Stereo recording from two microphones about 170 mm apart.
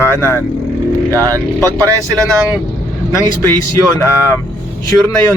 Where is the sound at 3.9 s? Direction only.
20° left (ahead or behind).